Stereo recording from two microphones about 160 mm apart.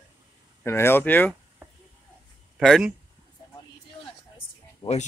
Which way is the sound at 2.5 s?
Centre (ahead or behind).